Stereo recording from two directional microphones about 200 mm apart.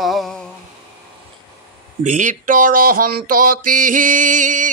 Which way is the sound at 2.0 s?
40° right (ahead or behind).